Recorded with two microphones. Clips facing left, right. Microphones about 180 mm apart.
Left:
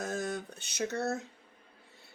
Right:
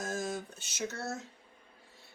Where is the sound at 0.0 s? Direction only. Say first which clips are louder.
Left 1 dB; 65° left (ahead or behind).